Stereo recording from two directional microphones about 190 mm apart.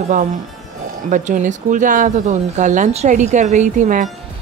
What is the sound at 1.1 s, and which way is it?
Speech, 40° right (ahead or behind).